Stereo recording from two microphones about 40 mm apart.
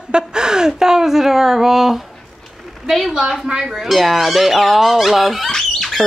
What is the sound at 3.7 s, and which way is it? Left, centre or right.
Speech, centre.